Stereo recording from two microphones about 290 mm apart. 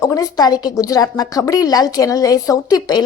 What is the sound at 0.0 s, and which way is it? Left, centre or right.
A woman's voice, centre.